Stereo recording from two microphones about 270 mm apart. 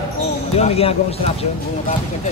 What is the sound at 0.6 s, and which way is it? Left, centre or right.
Speech, left.